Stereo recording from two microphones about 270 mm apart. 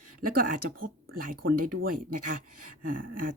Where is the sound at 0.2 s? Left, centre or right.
Right.